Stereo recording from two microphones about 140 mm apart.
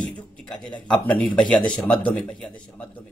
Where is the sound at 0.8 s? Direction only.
10° left (ahead or behind).